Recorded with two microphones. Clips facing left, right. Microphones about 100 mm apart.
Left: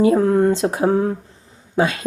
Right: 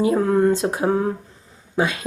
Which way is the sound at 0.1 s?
30° left (ahead or behind).